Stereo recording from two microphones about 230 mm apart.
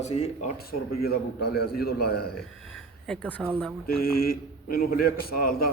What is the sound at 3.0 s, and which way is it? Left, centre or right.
Speech, centre.